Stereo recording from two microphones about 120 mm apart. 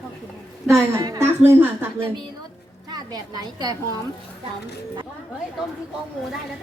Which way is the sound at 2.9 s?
35° right (ahead or behind).